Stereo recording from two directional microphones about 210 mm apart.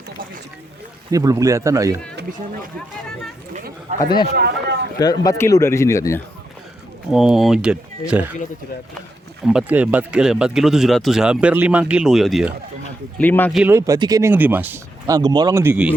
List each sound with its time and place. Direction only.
1.1 s speech: 15° right (ahead or behind)
4.4 s speech: 50° right (ahead or behind)
4.9 s speech: 15° left (ahead or behind)
7.1 s speech: centre (ahead or behind)
9.5 s speech: 5° right (ahead or behind)
13.6 s speech: 10° right (ahead or behind)